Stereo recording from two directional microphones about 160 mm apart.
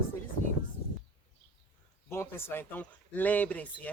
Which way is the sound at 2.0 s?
15° left (ahead or behind).